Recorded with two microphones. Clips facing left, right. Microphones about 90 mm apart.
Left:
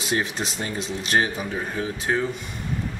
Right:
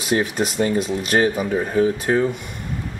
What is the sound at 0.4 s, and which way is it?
Speech, 50° right (ahead or behind).